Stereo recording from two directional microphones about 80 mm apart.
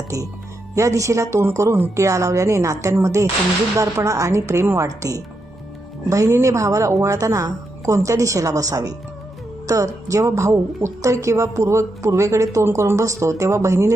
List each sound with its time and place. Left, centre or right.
0.8 s speech: right
6.1 s speech: right